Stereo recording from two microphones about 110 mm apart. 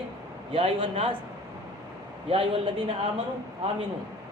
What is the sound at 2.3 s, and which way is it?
Speech, 55° right (ahead or behind).